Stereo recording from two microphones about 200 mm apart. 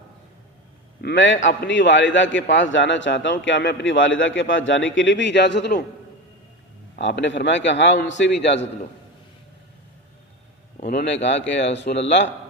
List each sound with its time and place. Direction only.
1.0 s a man's voice: 70° left (ahead or behind)
7.0 s a man's voice: 60° left (ahead or behind)
10.8 s a man's voice: 55° left (ahead or behind)